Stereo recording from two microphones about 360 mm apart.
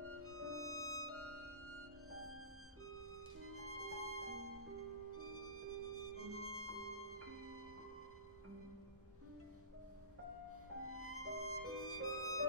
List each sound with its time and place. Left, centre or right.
0.0 s music: right
10.8 s music: right